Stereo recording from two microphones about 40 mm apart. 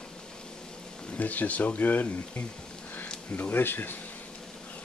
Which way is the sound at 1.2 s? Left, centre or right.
Left.